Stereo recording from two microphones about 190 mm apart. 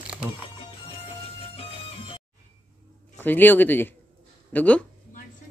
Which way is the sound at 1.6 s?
30° left (ahead or behind).